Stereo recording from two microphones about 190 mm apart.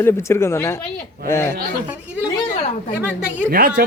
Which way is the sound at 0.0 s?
15° left (ahead or behind).